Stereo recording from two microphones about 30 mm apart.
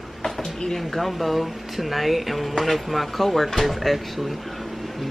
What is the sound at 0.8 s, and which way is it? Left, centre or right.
Speech, centre.